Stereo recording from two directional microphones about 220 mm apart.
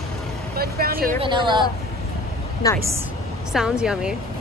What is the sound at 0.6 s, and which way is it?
Speech, 45° right (ahead or behind).